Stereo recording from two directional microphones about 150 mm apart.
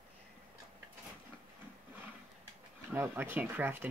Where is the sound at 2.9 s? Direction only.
15° right (ahead or behind).